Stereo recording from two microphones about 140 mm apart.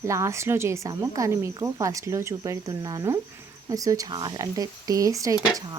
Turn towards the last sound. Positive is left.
turn(degrees=-25)  # may be behind; listen again after turning